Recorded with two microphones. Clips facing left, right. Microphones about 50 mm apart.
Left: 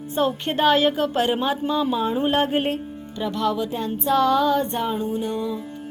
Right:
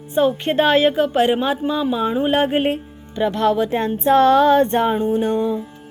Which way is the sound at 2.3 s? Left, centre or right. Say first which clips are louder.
Right 4 dB; right.